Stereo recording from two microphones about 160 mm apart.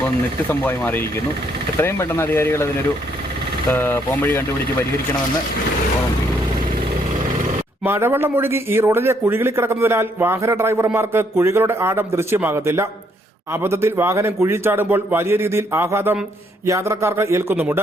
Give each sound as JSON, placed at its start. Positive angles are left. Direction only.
{"t": 0.4, "sound": "speech", "side_deg": 10}
{"t": 3.7, "sound": "speech", "side_deg": 15}
{"t": 7.9, "sound": "a man's voice", "side_deg": -15}